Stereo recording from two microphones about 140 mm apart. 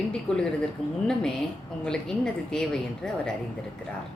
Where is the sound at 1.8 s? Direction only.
5° left (ahead or behind).